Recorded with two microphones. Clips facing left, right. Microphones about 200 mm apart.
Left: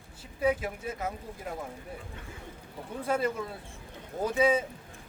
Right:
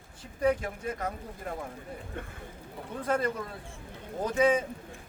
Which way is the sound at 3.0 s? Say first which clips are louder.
Even; 5° left (ahead or behind).